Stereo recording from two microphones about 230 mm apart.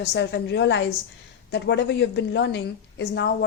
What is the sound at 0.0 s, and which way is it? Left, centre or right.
Speech, left.